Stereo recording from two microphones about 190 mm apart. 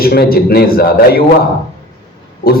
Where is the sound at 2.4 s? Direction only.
50° left (ahead or behind).